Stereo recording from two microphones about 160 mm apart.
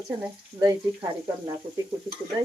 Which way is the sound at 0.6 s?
20° right (ahead or behind).